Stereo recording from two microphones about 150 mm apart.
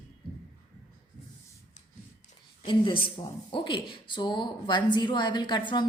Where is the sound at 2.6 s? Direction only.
30° left (ahead or behind).